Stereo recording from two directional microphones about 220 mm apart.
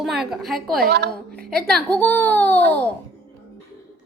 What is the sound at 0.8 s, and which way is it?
Speech, 45° right (ahead or behind).